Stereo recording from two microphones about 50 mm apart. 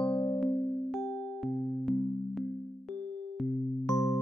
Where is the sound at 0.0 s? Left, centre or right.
Left.